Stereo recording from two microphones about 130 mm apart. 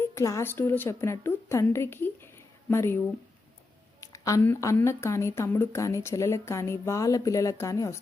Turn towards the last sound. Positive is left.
turn(degrees=25)  # may be behind; listen again after turning